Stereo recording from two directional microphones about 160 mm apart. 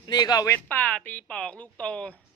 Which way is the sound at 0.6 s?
10° left (ahead or behind).